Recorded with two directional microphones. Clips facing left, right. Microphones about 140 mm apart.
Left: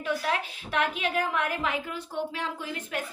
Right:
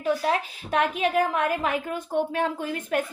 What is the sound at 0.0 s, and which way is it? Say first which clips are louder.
A woman's voice: right 5 dB; 40° right (ahead or behind).